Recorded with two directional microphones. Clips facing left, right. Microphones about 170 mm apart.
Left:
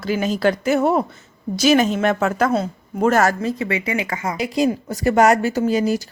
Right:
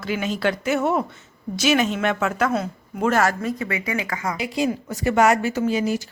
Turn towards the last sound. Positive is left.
turn(degrees=40)  # may be behind; listen again after turning